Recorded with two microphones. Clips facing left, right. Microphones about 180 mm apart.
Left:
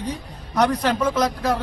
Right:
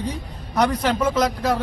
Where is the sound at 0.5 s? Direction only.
10° right (ahead or behind).